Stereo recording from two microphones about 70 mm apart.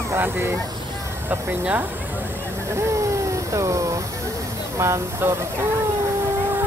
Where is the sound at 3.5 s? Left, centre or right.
Right.